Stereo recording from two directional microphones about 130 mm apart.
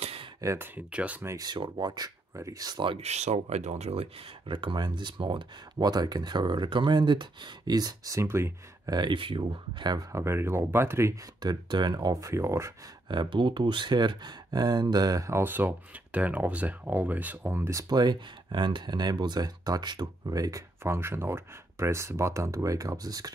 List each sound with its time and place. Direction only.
0.0 s a sound: 45° right (ahead or behind)
0.4 s speech: 25° right (ahead or behind)
0.7 s speech: 10° right (ahead or behind)
1.3 s speech: 30° right (ahead or behind)
3.0 s speech: 60° right (ahead or behind); by 8.9 s 20° right (ahead or behind)
8.9 s speech: 35° right (ahead or behind); by 11.1 s 20° right (ahead or behind)
11.4 s speech: 35° right (ahead or behind)
13.1 s speech: 35° right (ahead or behind)